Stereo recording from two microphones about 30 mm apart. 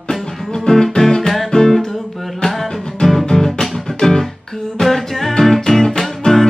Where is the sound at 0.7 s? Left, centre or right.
Left.